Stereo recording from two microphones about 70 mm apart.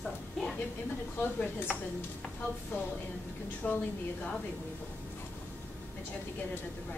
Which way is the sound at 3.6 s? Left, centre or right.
Left.